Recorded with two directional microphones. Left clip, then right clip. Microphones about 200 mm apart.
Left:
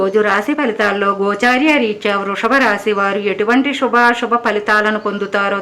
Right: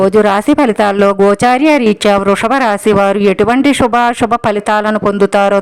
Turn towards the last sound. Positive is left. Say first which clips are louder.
# right 7 dB
turn(degrees=-45)  # may be behind; listen again after turning